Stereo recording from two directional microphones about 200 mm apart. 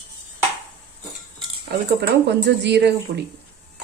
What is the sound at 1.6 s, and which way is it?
Speech, 55° right (ahead or behind).